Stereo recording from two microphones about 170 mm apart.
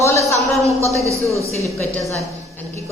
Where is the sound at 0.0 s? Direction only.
15° left (ahead or behind).